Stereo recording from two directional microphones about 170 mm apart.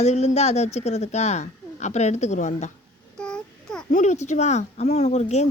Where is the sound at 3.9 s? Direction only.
45° left (ahead or behind).